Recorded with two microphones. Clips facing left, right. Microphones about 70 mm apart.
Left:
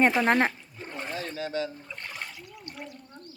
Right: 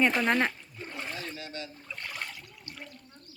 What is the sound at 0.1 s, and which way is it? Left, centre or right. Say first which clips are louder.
Speech: left 3 dB; left.